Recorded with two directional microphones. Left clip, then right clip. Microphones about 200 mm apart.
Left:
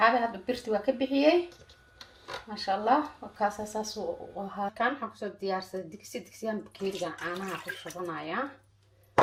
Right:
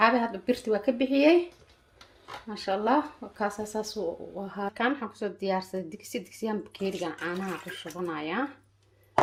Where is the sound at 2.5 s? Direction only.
60° right (ahead or behind).